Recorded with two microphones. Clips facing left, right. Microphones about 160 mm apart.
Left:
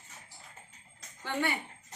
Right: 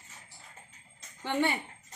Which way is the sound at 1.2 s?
20° right (ahead or behind).